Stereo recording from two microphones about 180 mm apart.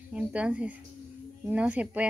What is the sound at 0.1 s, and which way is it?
A woman's voice, 5° right (ahead or behind).